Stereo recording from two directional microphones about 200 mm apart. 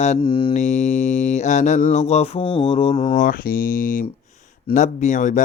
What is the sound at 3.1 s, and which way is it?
Speech, 45° left (ahead or behind).